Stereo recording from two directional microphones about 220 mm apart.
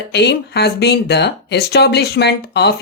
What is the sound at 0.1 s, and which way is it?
Speech, 50° left (ahead or behind).